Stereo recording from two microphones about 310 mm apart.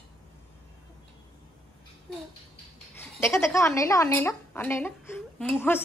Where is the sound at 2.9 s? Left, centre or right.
Centre.